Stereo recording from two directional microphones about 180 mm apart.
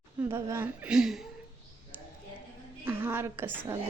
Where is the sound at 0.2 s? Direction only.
15° right (ahead or behind).